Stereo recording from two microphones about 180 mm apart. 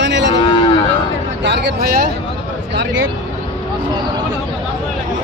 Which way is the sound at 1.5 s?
60° right (ahead or behind).